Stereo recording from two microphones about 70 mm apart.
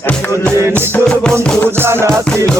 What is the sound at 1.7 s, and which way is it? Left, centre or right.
Music, right.